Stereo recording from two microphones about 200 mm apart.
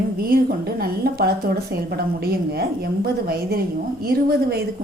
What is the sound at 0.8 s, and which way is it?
A woman's voice, 50° right (ahead or behind).